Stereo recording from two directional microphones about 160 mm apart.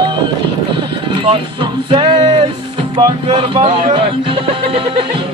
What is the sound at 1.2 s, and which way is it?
Music, 35° right (ahead or behind).